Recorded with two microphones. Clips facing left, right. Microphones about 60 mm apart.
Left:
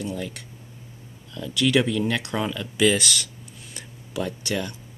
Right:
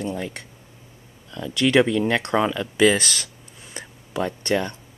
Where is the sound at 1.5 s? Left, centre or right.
Right.